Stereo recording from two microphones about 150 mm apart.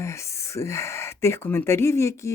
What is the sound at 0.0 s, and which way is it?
Speech, 20° left (ahead or behind).